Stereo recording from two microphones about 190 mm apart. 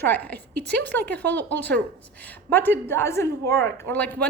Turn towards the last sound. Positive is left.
turn(degrees=10)  # may be behind; listen again after turning